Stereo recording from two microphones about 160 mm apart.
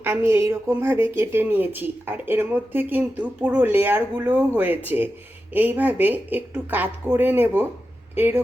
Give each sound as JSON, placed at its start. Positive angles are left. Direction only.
{"t": 0.0, "sound": "a woman's voice", "side_deg": -15}